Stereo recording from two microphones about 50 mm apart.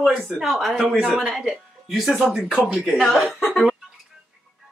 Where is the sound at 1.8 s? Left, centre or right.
Centre.